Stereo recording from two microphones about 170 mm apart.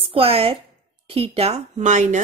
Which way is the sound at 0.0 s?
35° right (ahead or behind).